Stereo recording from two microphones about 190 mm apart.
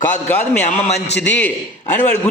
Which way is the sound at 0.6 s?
35° left (ahead or behind).